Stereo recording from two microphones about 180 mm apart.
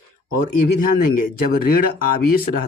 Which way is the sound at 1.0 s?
55° left (ahead or behind).